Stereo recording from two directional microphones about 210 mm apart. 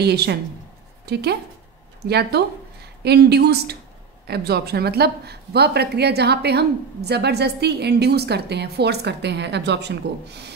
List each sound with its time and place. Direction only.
0.0 s a woman's voice: 50° right (ahead or behind)